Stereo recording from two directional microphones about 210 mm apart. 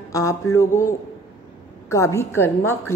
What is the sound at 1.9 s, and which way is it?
A woman's voice, 15° left (ahead or behind).